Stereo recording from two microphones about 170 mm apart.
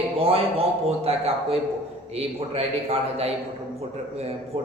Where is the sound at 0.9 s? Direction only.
35° right (ahead or behind).